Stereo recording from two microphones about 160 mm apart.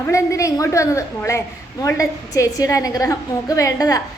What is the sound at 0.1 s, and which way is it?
A woman's voice, 20° left (ahead or behind).